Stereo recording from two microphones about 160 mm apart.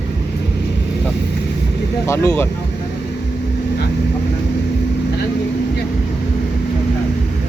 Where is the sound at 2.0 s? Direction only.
20° left (ahead or behind).